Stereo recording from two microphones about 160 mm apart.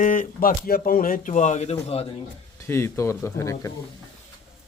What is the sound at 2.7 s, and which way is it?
Speech, 15° left (ahead or behind).